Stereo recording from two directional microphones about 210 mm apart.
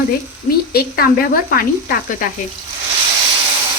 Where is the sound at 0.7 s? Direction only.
45° left (ahead or behind).